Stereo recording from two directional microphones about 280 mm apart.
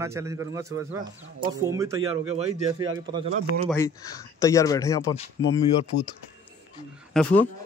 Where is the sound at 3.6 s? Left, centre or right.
Centre.